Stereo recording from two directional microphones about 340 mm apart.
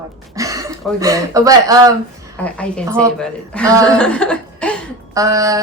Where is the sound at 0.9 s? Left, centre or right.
Centre.